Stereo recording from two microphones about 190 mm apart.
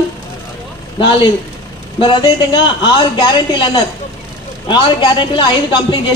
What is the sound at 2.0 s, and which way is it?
A woman's voice, 25° left (ahead or behind).